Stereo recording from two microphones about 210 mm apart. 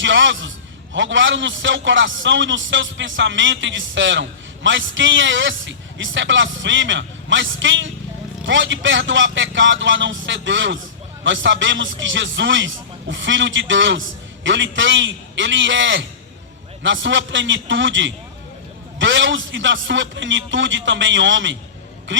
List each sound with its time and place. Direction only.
0.0 s a man's voice: 60° right (ahead or behind)